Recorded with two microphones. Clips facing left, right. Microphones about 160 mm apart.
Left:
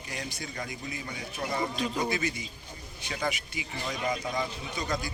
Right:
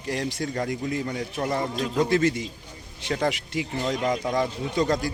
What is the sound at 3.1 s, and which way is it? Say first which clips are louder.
Speech: right 8 dB; 60° right (ahead or behind).